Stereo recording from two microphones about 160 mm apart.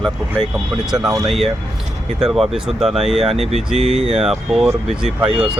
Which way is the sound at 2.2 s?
5° right (ahead or behind).